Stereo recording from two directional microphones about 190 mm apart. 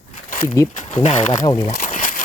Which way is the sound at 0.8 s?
35° left (ahead or behind).